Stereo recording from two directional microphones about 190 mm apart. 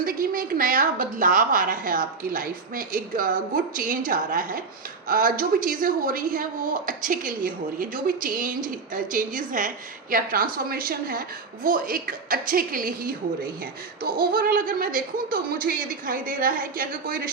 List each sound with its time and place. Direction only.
0.0 s a woman's voice: 50° right (ahead or behind)